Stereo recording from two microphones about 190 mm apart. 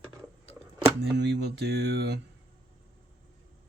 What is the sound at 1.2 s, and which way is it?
Mantra, 65° right (ahead or behind).